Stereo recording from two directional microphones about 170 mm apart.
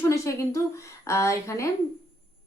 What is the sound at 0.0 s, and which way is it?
A woman's voice, 15° left (ahead or behind).